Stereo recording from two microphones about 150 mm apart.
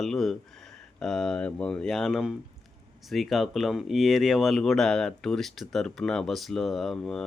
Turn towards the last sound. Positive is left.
turn(degrees=5)  # may be behind; listen again after turning